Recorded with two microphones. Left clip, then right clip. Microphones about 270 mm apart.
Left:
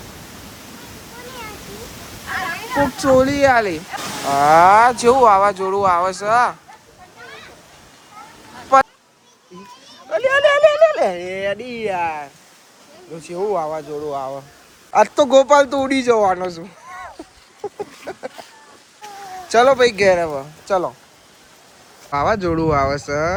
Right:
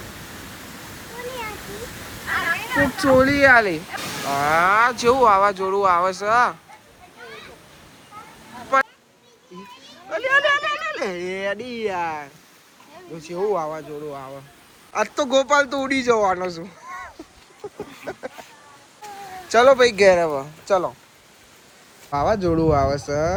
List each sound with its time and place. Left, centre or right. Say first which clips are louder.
2.3 s speech: even; centre
10.1 s speech: left 4 dB; centre
13.3 s speech: left 2 dB; centre
17.6 s a sound: left 7 dB; centre
18.0 s a sound: right 2 dB; centre
19.5 s speech: left 1 dB; centre
22.1 s speech: left 2 dB; centre